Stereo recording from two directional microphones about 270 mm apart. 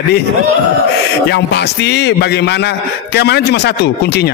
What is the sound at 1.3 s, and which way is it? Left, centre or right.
A man's voice, left.